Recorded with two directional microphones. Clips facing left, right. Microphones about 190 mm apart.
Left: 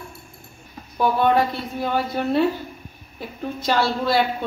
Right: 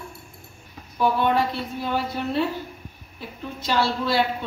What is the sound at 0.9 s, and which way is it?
A woman's voice, 50° left (ahead or behind).